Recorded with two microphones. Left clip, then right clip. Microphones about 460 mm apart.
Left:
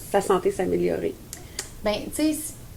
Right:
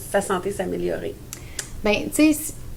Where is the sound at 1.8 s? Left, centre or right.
Right.